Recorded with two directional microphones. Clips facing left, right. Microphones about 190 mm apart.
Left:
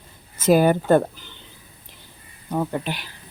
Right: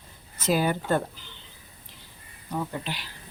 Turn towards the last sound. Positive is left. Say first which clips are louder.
# left 7 dB
turn(degrees=55)  # may be behind; listen again after turning